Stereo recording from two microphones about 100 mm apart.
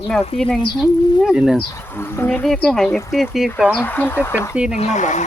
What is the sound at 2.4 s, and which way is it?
Speech, 5° left (ahead or behind).